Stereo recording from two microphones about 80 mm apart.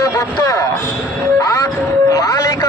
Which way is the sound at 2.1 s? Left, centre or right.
Left.